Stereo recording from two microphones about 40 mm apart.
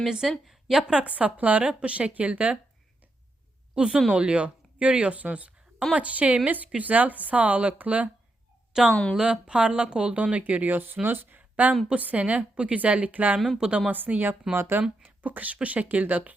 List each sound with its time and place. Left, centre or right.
0.1 s a woman's voice: centre
0.8 s speech: centre
1.0 s a woman's voice: right
3.8 s a woman's voice: right
8.7 s speech: centre
10.2 s a woman's voice: right
13.9 s a woman's voice: right
15.0 s a woman's voice: right